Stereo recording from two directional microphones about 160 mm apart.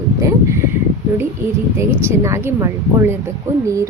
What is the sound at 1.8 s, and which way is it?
A woman's voice, 15° right (ahead or behind).